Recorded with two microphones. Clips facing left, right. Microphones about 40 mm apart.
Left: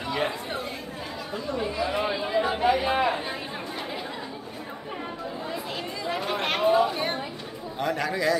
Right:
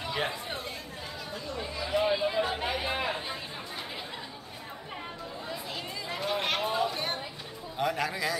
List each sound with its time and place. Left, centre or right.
0.1 s chatter: centre
1.6 s chatter: centre
2.9 s a sound: left
6.2 s chatter: centre
7.8 s a man's voice: centre